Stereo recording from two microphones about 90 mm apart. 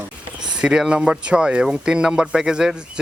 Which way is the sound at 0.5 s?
10° right (ahead or behind).